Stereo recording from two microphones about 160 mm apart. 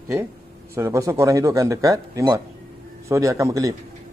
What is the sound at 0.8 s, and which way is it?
A man's voice, 20° right (ahead or behind).